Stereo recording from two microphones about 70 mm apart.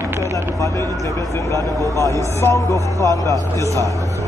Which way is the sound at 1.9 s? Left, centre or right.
Left.